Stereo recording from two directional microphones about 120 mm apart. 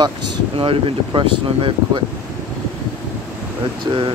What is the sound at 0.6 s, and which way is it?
Speech, 50° right (ahead or behind).